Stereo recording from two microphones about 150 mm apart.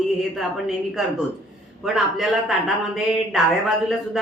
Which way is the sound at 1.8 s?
5° right (ahead or behind).